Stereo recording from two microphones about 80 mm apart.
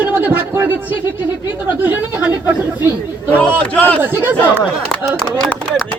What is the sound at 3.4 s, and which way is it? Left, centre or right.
Speech, centre.